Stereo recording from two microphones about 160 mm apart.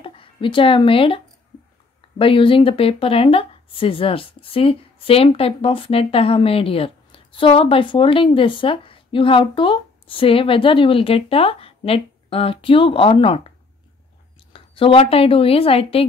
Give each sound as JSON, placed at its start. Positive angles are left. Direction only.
{"t": 0.0, "sound": "speech", "side_deg": 35}
{"t": 14.5, "sound": "speech", "side_deg": 35}